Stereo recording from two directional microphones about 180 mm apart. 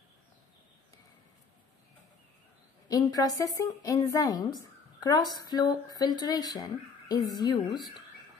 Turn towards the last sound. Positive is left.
turn(degrees=25)  # may be behind; listen again after turning